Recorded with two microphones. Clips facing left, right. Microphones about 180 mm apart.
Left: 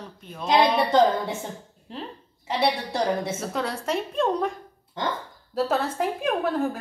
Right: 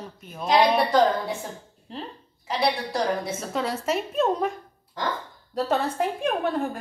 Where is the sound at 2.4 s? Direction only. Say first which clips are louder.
Left 1 dB; 25° left (ahead or behind).